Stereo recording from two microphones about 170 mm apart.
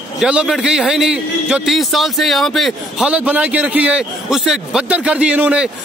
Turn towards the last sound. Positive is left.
turn(degrees=-5)  # may be behind; listen again after turning